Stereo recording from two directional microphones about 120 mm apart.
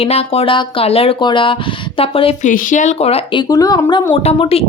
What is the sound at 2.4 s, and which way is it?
Speech, 90° left.